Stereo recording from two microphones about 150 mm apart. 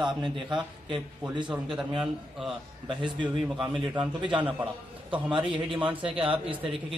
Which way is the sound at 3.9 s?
35° right (ahead or behind).